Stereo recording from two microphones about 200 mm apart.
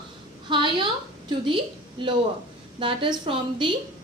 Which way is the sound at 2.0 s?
25° right (ahead or behind).